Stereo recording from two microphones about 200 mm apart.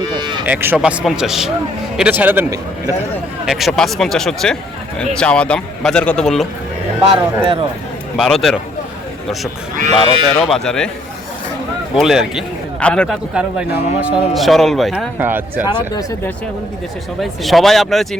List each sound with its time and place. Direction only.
0.1 s sheep: 20° right (ahead or behind)
0.4 s a man's voice: 10° right (ahead or behind)
3.4 s speech: centre (ahead or behind)
7.0 s speech: 25° right (ahead or behind)
8.1 s speech: centre (ahead or behind)
10.3 s speech: centre (ahead or behind)
11.9 s a man's voice: centre (ahead or behind)
15.6 s speech: 20° left (ahead or behind)
17.2 s speech: centre (ahead or behind)